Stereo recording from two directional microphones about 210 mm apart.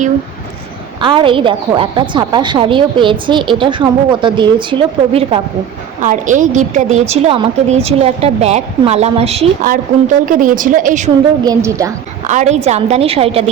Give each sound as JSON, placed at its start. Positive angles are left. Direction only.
{"t": 1.0, "sound": "a woman's voice", "side_deg": -25}
{"t": 6.0, "sound": "a woman's voice", "side_deg": -35}
{"t": 10.2, "sound": "a woman's voice", "side_deg": -40}
{"t": 11.4, "sound": "a woman's voice", "side_deg": -15}
{"t": 12.3, "sound": "a woman's voice", "side_deg": -35}